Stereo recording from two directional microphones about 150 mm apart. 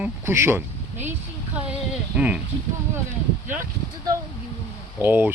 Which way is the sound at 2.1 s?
10° right (ahead or behind).